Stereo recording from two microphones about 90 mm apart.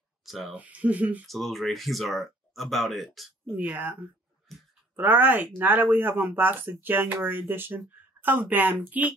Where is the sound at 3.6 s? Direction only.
20° right (ahead or behind).